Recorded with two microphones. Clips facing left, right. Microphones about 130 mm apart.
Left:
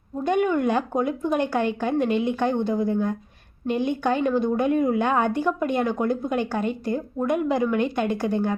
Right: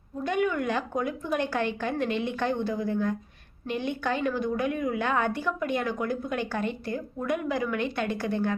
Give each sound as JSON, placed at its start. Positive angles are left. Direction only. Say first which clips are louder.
{"t": 0.3, "sound": "a woman's voice", "louder": "left 5 dB", "side_deg": 25}
{"t": 4.7, "sound": "a woman's voice", "louder": "left 8 dB", "side_deg": 40}
{"t": 4.9, "sound": "a woman's voice", "louder": "left 5 dB", "side_deg": 20}